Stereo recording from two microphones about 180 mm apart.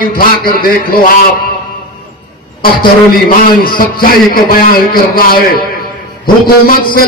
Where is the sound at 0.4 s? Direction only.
55° left (ahead or behind).